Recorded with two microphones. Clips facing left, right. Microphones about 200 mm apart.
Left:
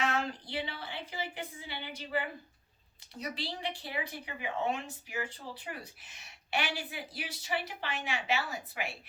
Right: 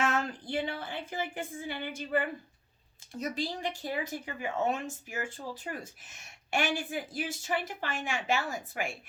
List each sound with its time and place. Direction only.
0.0 s speech: 50° right (ahead or behind)